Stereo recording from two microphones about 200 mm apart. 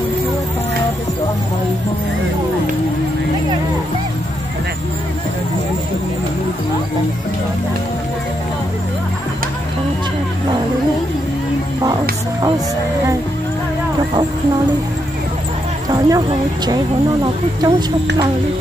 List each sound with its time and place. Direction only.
15.9 s speech: 20° right (ahead or behind)